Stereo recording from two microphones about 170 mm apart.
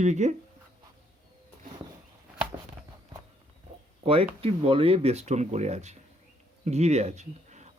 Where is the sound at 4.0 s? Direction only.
35° right (ahead or behind).